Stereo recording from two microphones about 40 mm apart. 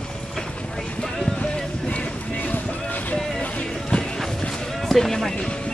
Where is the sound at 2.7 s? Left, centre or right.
Left.